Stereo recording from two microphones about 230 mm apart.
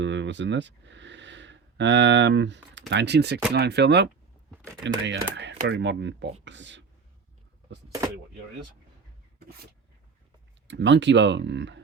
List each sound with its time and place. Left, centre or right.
0.0 s speech: right
10.7 s speech: right